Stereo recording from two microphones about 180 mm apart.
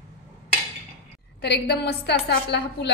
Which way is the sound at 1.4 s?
65° left (ahead or behind).